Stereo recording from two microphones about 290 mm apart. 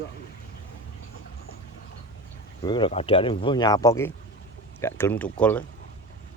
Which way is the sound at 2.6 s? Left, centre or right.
Centre.